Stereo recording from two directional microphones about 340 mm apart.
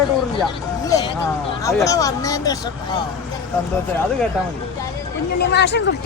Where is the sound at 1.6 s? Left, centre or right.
Centre.